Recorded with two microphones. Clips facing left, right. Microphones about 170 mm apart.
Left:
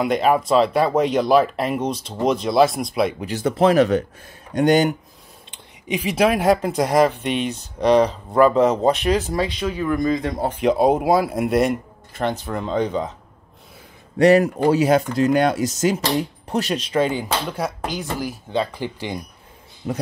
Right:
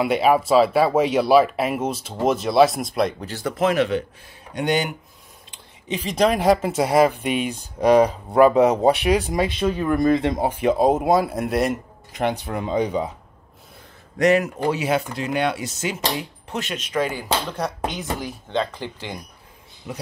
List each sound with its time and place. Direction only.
0.0 s speech: 5° right (ahead or behind)
3.2 s speech: 15° left (ahead or behind)
3.5 s speech: 35° left (ahead or behind)
5.9 s speech: 10° left (ahead or behind); by 9.5 s 15° right (ahead or behind)
10.1 s speech: 25° right (ahead or behind)
10.4 s speech: 5° right (ahead or behind)
12.1 s speech: 15° right (ahead or behind)
14.1 s speech: 35° left (ahead or behind)
17.5 s speech: 5° left (ahead or behind)
19.8 s speech: 40° left (ahead or behind)